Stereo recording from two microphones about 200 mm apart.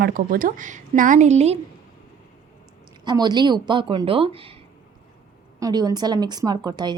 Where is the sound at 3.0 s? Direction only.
20° right (ahead or behind).